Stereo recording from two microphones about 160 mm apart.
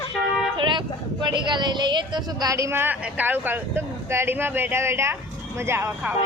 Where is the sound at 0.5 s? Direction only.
30° right (ahead or behind); by 6.1 s 10° right (ahead or behind).